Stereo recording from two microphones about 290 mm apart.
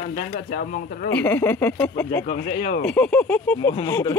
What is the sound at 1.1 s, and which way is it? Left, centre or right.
Speech, centre.